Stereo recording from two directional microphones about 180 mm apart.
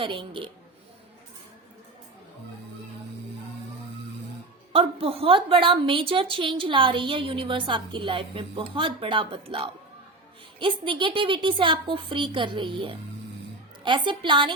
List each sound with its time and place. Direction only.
0.0 s a woman's voice: 30° right (ahead or behind)
4.7 s a woman's voice: 30° right (ahead or behind)